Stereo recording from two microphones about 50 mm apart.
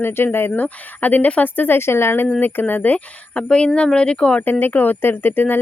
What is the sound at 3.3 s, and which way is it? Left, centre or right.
Speech, left.